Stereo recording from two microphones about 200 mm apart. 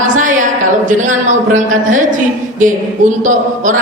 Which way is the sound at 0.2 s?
40° right (ahead or behind).